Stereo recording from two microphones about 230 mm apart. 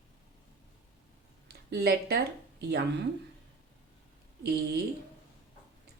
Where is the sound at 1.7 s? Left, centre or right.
Right.